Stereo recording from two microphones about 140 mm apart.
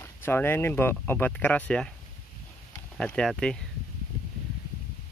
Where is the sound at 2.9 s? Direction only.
5° left (ahead or behind).